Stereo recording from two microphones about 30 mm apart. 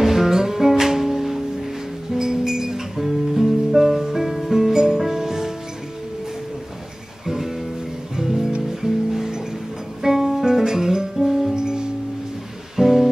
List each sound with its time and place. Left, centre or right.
0.0 s music: centre
7.2 s music: centre
11.1 s music: centre
11.5 s music: right
12.7 s music: centre